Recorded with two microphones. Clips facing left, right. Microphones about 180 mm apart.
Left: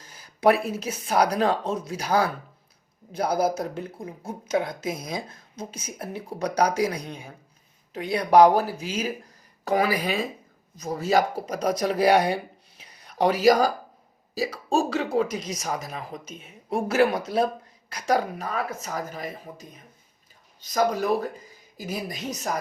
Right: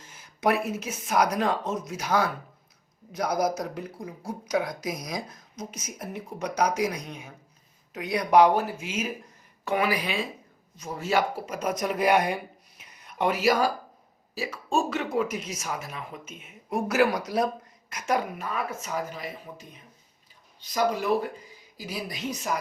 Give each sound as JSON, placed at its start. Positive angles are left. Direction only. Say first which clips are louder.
{"t": 0.0, "sound": "a woman's voice", "louder": "left 6 dB", "side_deg": 35}